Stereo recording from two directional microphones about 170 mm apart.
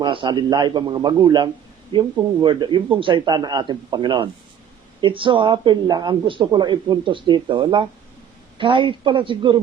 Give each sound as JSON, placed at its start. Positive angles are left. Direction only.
{"t": 0.0, "sound": "speech", "side_deg": -30}